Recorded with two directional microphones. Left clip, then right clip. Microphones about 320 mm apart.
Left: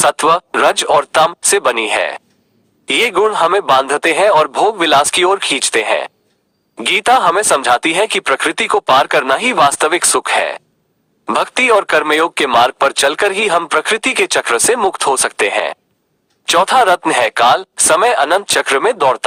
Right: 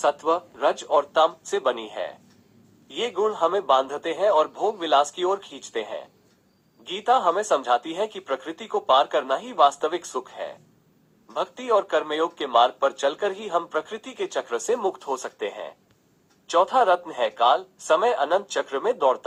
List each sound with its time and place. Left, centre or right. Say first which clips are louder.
0.0 s speech: left 11 dB; left